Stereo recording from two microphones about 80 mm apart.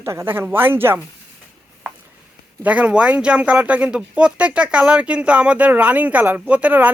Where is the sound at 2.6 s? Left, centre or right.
Centre.